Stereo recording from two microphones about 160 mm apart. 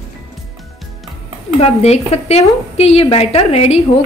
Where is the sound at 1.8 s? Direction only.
40° left (ahead or behind).